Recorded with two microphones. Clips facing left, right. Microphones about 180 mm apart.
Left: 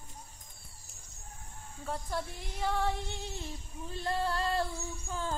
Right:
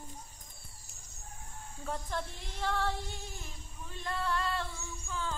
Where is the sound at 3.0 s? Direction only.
25° left (ahead or behind).